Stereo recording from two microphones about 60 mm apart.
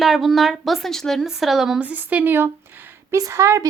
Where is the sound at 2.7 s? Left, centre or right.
Right.